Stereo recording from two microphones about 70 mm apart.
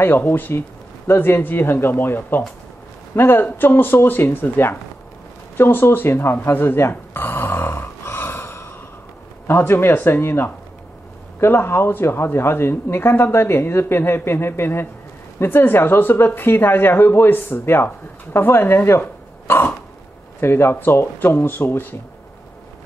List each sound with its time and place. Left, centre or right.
0.0 s speech: left
5.6 s a sound: left
9.5 s speech: left